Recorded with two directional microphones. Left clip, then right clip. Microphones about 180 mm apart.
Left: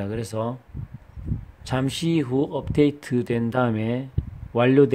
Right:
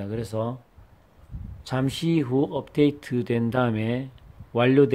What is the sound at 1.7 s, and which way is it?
Speech, 10° left (ahead or behind).